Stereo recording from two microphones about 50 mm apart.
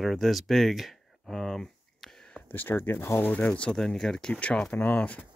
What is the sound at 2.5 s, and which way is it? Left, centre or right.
Speech, left.